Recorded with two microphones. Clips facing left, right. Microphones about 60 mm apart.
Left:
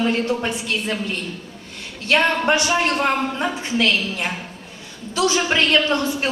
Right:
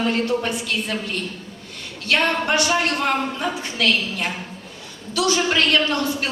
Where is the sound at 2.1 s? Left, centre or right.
Left.